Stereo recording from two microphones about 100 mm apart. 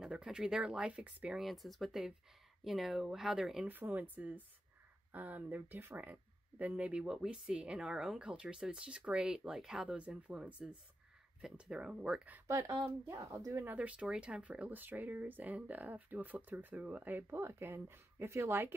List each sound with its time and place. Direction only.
0.0 s speech: 5° right (ahead or behind)
1.4 s speech: centre (ahead or behind)
3.6 s speech: 20° right (ahead or behind)
12.4 s speech: 30° right (ahead or behind)
13.7 s speech: 10° right (ahead or behind)